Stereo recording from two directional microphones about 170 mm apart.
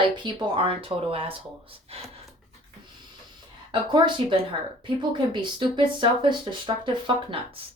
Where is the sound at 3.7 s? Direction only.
30° right (ahead or behind).